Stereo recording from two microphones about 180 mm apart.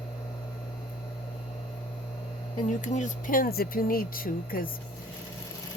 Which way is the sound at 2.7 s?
45° left (ahead or behind).